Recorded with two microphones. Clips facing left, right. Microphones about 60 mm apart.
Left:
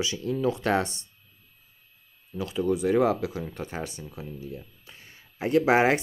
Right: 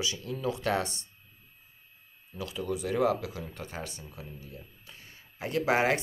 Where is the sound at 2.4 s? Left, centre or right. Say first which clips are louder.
Left 7 dB; left.